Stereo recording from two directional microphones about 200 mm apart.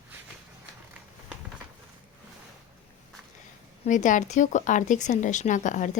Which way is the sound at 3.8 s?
40° left (ahead or behind).